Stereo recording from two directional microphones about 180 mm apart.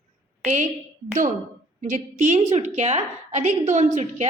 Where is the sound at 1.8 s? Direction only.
45° right (ahead or behind).